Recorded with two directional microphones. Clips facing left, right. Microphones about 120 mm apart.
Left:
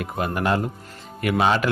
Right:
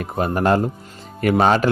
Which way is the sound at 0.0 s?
35° right (ahead or behind).